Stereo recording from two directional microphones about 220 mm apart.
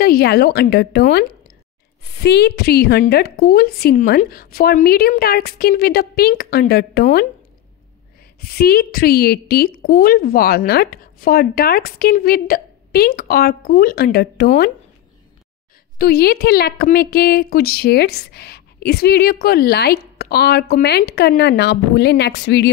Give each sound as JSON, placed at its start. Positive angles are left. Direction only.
{"t": 0.0, "sound": "a woman's voice", "side_deg": 45}
{"t": 8.4, "sound": "a woman's voice", "side_deg": 45}
{"t": 16.0, "sound": "a woman's voice", "side_deg": 45}